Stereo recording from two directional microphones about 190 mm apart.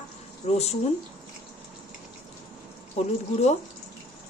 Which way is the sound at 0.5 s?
35° left (ahead or behind).